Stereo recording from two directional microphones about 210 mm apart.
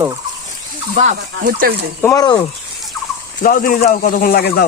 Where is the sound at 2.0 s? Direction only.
15° left (ahead or behind).